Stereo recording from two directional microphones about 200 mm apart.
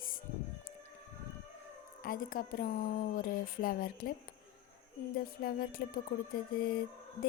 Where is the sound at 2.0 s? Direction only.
45° left (ahead or behind).